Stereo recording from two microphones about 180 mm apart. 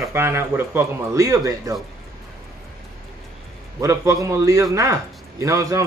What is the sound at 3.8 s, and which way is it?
Speech, 15° right (ahead or behind).